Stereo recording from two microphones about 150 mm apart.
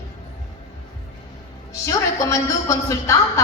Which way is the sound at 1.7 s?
20° left (ahead or behind).